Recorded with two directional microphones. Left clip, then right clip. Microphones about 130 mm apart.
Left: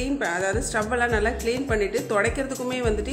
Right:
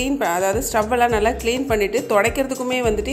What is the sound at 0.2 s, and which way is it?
A woman's voice, 30° right (ahead or behind).